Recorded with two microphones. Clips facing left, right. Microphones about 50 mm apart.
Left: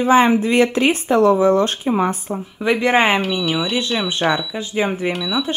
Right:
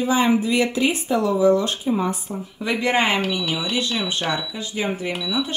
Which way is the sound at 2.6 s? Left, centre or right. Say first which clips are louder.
Left 5 dB; left.